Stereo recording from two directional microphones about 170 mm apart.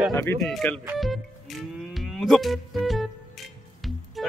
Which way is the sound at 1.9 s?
Centre (ahead or behind).